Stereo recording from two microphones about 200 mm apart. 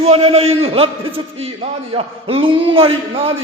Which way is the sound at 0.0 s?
30° right (ahead or behind).